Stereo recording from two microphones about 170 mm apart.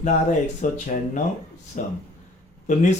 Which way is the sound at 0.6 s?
50° left (ahead or behind).